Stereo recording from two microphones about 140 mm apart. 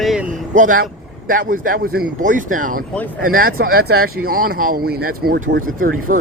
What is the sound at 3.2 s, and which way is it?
Speech, 90° right.